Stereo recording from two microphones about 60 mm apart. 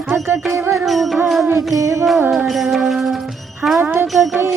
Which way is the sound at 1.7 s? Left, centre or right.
Right.